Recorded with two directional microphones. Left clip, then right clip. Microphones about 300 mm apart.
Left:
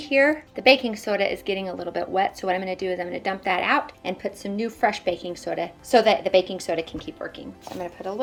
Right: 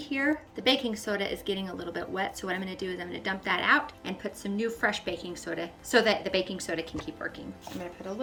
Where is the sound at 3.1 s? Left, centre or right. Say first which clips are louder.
Left 3 dB; left.